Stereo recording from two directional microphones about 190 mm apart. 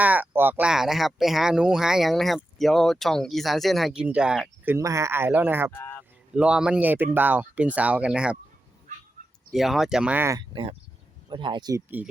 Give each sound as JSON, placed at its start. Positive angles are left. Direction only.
{"t": 0.0, "sound": "speech", "side_deg": -10}
{"t": 5.7, "sound": "a sound", "side_deg": 10}
{"t": 6.3, "sound": "speech", "side_deg": -5}
{"t": 9.5, "sound": "speech", "side_deg": 0}